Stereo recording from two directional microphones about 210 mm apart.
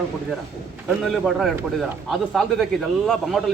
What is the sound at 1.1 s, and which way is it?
Speech, centre (ahead or behind).